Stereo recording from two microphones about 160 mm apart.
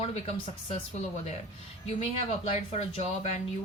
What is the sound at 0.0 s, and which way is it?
Speech, 40° left (ahead or behind).